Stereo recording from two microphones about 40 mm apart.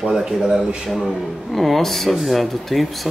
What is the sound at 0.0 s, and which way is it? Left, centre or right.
Speech, centre.